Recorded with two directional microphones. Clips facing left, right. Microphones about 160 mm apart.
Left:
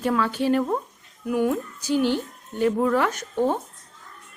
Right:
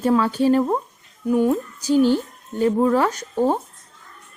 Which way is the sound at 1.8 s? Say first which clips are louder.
Right 6 dB; 40° right (ahead or behind).